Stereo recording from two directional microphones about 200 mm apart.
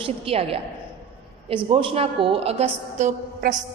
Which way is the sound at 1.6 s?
25° right (ahead or behind).